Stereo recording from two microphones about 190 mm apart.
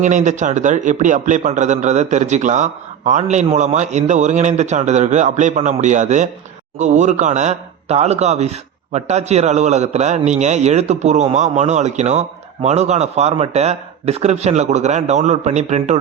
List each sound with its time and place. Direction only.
0.0 s a man's voice: 40° right (ahead or behind)